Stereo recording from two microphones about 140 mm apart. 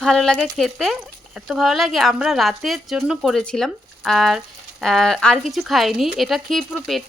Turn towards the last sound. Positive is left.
turn(degrees=0)  # may be behind; listen again after turning